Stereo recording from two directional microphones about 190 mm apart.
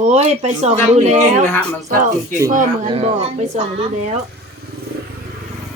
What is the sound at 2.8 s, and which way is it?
Speech, 30° right (ahead or behind).